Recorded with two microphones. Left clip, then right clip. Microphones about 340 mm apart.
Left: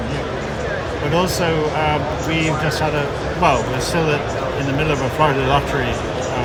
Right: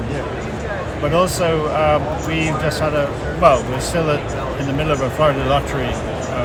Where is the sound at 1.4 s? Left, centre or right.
Centre.